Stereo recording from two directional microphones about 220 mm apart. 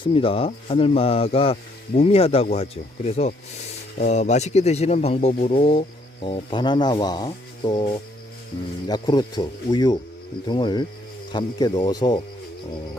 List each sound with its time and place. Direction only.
0.1 s speech: 25° left (ahead or behind)